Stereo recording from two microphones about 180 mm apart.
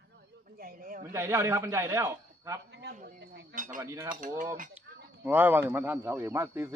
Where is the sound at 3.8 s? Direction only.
15° right (ahead or behind).